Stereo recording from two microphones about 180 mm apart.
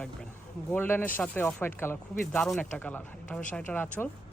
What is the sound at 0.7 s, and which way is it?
Speech, 10° left (ahead or behind).